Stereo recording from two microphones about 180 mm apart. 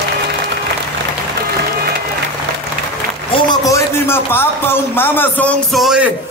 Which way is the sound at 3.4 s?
15° left (ahead or behind).